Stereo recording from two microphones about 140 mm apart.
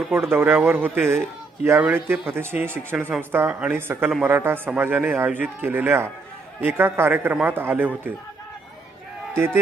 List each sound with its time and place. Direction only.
0.2 s a woman's voice: 15° right (ahead or behind)
9.3 s speech: 15° right (ahead or behind)